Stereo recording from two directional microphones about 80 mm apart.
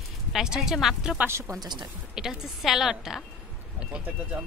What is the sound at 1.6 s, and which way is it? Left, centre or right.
Speech, right.